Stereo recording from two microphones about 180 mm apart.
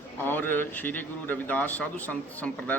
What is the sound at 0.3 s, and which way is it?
A man's voice, 10° left (ahead or behind).